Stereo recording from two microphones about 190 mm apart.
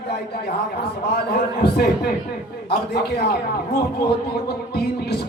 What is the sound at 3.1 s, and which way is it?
Speech, 55° left (ahead or behind).